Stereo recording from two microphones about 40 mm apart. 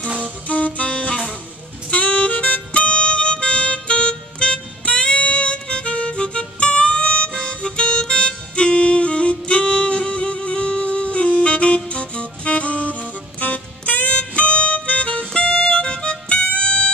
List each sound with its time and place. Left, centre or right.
0.2 s music: left